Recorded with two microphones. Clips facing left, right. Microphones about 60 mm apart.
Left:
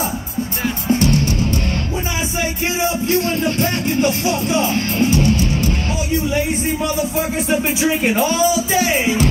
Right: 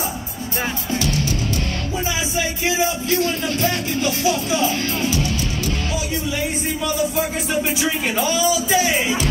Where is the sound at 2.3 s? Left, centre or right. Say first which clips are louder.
Right 1 dB; left.